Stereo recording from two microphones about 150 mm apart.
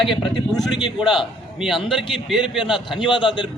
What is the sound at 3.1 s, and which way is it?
Speech, 35° left (ahead or behind).